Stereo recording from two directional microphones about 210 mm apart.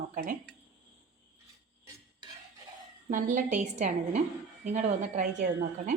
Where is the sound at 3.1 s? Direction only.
40° right (ahead or behind).